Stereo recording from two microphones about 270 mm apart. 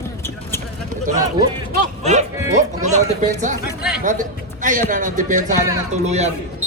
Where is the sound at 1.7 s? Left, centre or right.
Right.